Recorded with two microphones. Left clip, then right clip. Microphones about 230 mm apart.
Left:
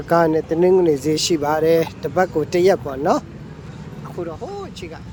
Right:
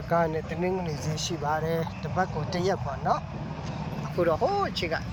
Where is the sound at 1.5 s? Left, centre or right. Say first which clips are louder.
Left 11 dB; left.